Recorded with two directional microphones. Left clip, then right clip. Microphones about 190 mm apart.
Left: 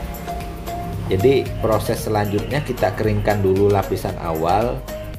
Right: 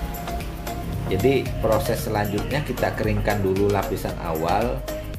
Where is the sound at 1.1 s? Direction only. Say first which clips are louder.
Left 5 dB; 15° left (ahead or behind).